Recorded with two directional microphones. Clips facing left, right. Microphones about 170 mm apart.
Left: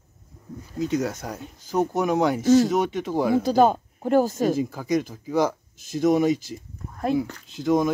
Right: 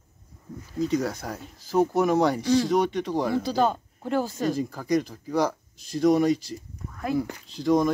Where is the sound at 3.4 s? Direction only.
50° left (ahead or behind).